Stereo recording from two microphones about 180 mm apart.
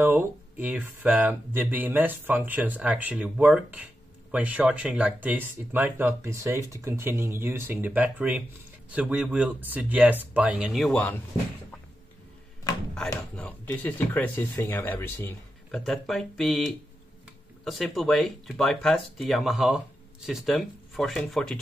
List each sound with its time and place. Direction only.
0.0 s speech: 10° right (ahead or behind)
13.4 s speech: 10° left (ahead or behind)
15.8 s speech: centre (ahead or behind)